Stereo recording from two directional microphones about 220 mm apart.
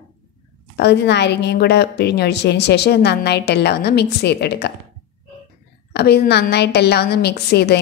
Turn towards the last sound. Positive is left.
turn(degrees=50)  # may be behind; listen again after turning